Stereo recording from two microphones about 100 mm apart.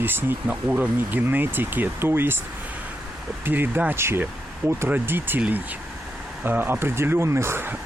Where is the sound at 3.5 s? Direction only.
20° right (ahead or behind).